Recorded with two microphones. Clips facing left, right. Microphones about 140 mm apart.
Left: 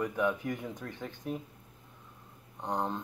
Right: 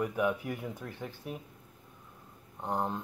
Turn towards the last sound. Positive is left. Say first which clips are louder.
# even
turn(degrees=-5)  # may be behind; listen again after turning